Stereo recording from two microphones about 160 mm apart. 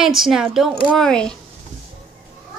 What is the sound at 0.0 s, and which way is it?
Speech, centre (ahead or behind).